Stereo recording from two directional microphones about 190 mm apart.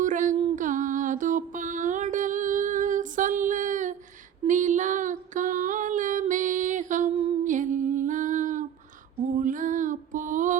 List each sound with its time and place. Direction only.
0.0 s music: 40° right (ahead or behind)
7.4 s a sound: 40° right (ahead or behind)
9.4 s music: 45° right (ahead or behind)